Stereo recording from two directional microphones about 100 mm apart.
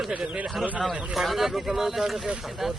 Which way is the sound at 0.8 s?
Centre (ahead or behind).